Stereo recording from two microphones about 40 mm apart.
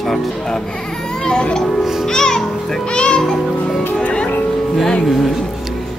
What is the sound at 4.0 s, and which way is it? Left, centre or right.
Speech, left.